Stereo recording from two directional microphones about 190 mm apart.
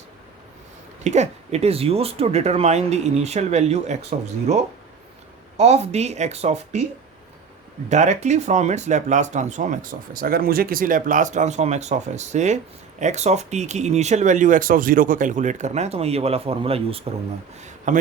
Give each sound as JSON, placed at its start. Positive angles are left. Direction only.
{"t": 1.0, "sound": "speech", "side_deg": -35}
{"t": 7.9, "sound": "speech", "side_deg": -40}